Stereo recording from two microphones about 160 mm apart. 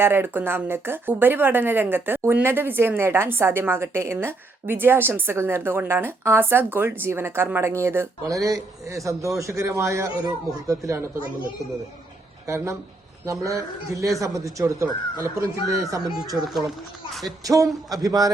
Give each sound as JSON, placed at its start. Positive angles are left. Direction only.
{"t": 0.0, "sound": "speech", "side_deg": -15}
{"t": 12.5, "sound": "speech", "side_deg": -20}
{"t": 16.4, "sound": "speech", "side_deg": 0}
{"t": 17.2, "sound": "speech", "side_deg": -20}